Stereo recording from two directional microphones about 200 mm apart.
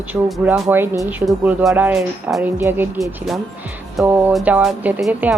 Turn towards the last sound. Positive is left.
turn(degrees=-5)  # may be behind; listen again after turning